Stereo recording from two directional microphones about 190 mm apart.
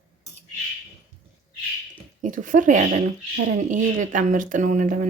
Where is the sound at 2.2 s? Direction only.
45° right (ahead or behind).